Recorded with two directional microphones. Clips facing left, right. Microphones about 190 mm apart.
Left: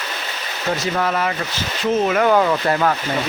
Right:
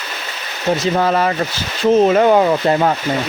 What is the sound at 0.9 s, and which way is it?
Speech, 35° right (ahead or behind).